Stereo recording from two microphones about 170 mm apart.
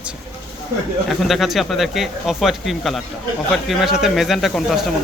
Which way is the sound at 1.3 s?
Centre (ahead or behind).